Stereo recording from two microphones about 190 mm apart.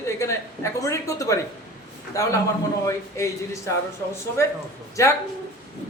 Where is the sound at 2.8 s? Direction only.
15° left (ahead or behind).